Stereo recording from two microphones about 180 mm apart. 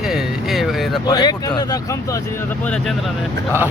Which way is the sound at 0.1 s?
Centre (ahead or behind).